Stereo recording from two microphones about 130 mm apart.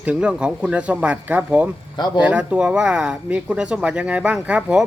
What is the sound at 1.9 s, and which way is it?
Speech, 35° left (ahead or behind).